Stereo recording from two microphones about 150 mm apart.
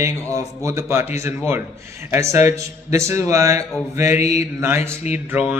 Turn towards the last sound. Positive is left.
turn(degrees=-10)  # may be behind; listen again after turning